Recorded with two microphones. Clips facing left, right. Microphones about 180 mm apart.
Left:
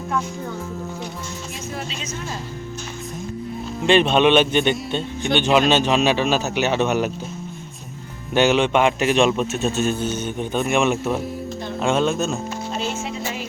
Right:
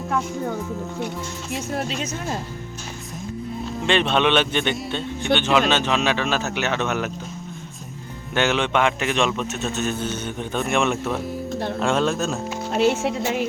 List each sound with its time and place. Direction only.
1.9 s speech: 55° right (ahead or behind)
3.8 s speech: 10° left (ahead or behind)
8.3 s speech: 15° left (ahead or behind)
12.7 s speech: 70° right (ahead or behind)